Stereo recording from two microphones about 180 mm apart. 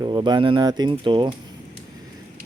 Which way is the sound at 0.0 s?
25° right (ahead or behind).